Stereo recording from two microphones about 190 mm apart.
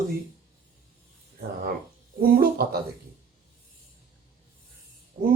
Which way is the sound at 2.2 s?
50° right (ahead or behind).